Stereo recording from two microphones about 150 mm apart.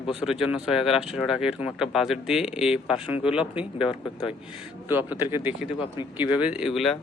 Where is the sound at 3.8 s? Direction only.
35° left (ahead or behind).